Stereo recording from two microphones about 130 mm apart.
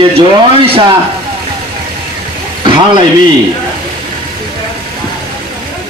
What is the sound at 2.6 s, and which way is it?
Speech, 35° right (ahead or behind).